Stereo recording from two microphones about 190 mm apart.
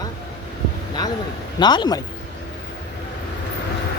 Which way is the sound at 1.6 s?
25° left (ahead or behind).